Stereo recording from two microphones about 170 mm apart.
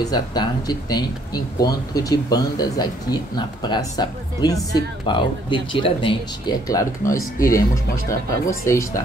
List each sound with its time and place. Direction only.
0.0 s speech: 25° left (ahead or behind)
7.3 s speech: 55° left (ahead or behind)
8.1 s speech: 15° left (ahead or behind)